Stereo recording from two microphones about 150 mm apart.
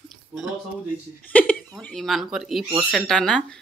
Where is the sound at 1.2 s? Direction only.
10° left (ahead or behind).